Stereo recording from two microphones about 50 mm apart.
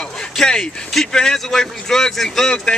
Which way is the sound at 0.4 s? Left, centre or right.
Centre.